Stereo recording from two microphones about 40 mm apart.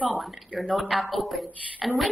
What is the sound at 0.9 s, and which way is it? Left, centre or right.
A woman's voice, centre.